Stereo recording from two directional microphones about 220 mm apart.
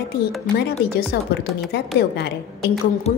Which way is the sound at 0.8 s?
45° left (ahead or behind).